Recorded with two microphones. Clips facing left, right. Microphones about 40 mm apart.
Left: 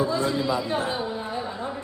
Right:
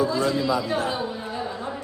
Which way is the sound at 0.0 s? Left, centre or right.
Left.